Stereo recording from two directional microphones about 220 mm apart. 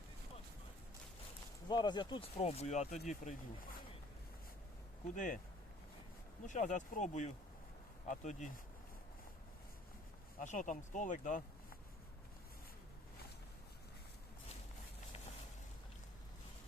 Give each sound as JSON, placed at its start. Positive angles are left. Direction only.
{"t": 1.6, "sound": "speech", "side_deg": 20}
{"t": 5.1, "sound": "speech", "side_deg": 35}
{"t": 6.4, "sound": "speech", "side_deg": 35}
{"t": 10.4, "sound": "speech", "side_deg": 35}